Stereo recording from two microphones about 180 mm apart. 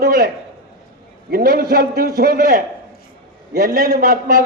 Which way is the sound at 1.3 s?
55° right (ahead or behind).